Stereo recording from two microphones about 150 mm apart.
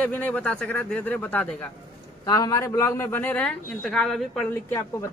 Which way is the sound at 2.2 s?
25° left (ahead or behind).